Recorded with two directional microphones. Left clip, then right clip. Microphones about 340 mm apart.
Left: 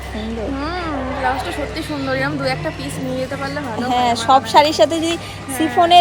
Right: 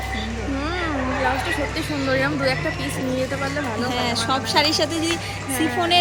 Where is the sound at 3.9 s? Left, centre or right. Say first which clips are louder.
Left 11 dB; centre.